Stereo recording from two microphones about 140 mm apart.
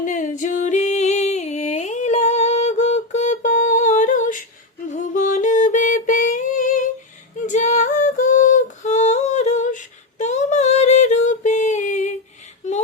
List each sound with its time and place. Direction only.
0.0 s music: 65° left (ahead or behind)
7.3 s female singing: 60° left (ahead or behind)